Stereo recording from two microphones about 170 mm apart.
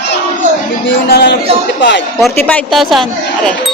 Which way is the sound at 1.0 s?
75° left (ahead or behind).